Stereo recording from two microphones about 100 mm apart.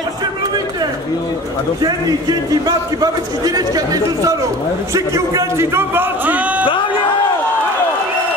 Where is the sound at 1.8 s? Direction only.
40° right (ahead or behind); by 6.6 s 15° right (ahead or behind).